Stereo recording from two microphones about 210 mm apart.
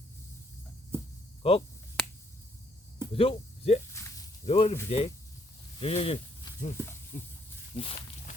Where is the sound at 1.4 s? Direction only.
30° left (ahead or behind).